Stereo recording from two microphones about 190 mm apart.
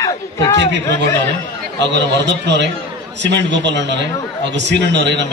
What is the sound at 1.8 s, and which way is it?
A man's voice, 65° right (ahead or behind).